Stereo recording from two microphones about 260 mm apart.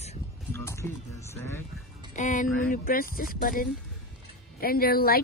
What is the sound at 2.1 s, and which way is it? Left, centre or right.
Speech, left.